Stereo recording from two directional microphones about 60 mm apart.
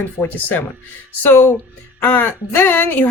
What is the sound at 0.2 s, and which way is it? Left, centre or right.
Speech, left.